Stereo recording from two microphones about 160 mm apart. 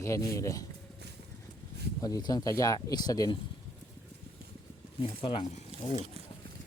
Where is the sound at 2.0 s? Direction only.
25° left (ahead or behind).